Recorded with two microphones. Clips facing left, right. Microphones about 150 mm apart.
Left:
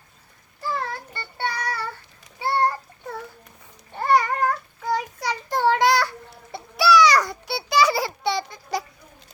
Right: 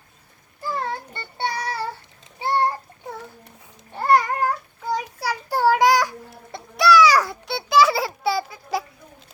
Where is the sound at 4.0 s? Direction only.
5° right (ahead or behind).